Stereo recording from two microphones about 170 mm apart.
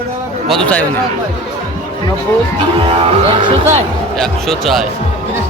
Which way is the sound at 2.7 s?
35° right (ahead or behind).